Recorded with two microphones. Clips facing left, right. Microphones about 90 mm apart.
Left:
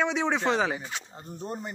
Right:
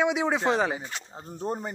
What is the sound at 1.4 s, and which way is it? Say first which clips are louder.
Speech: right 5 dB; 35° right (ahead or behind).